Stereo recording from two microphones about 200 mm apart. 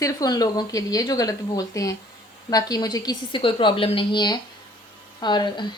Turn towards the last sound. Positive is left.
turn(degrees=20)  # may be behind; listen again after turning